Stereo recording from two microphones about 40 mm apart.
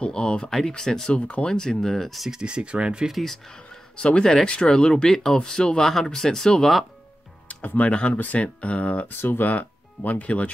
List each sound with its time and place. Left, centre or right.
0.0 s speech: left
0.5 s speech: centre
1.1 s speech: left
1.5 s speech: centre
2.4 s speech: right
3.1 s speech: centre
3.4 s speech: left
7.4 s music: left
7.9 s speech: left
9.0 s speech: left
9.4 s speech: left